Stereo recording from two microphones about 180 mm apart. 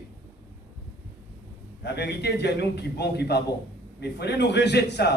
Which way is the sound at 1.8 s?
70° left (ahead or behind).